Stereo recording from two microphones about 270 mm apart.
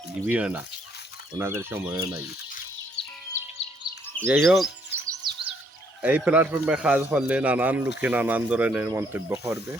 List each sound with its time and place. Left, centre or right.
0.2 s speech: centre
4.3 s speech: centre
5.0 s chirp: centre
6.0 s speech: centre